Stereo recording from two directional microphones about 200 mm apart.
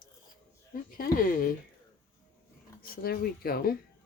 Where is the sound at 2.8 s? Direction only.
50° left (ahead or behind).